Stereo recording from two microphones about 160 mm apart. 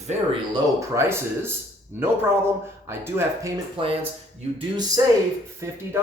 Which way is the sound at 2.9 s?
15° right (ahead or behind).